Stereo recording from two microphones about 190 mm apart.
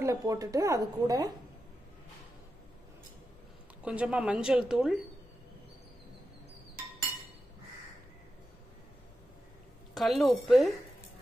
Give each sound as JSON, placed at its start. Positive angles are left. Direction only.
{"t": 0.0, "sound": "speech", "side_deg": -15}
{"t": 3.8, "sound": "a woman's voice", "side_deg": -5}
{"t": 9.9, "sound": "a woman's voice", "side_deg": 0}